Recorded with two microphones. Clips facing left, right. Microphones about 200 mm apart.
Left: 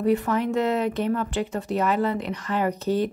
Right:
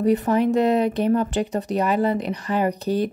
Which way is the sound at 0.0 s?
20° right (ahead or behind).